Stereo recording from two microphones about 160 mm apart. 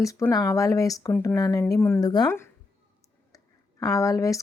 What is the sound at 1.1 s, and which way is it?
Speech, 10° left (ahead or behind).